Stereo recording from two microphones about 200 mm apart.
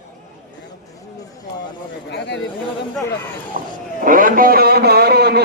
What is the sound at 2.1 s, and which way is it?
Speech, 60° left (ahead or behind).